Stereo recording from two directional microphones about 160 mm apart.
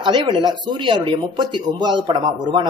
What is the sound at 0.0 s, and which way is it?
Speech, 30° right (ahead or behind).